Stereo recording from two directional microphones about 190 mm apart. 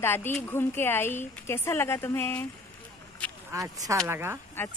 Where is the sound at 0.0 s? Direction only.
10° left (ahead or behind).